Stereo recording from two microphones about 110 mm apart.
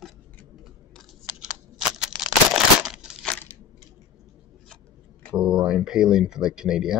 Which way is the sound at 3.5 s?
20° left (ahead or behind).